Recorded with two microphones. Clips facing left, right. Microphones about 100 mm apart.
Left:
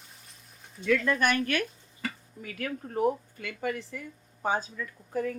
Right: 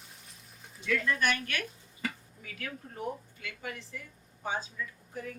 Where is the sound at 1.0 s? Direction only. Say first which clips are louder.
Left 4 dB; 45° left (ahead or behind).